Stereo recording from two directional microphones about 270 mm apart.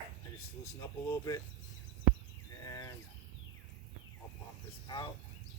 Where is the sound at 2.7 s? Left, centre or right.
Centre.